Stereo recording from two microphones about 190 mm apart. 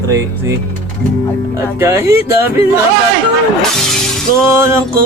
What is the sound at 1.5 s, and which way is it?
Speech, 15° right (ahead or behind).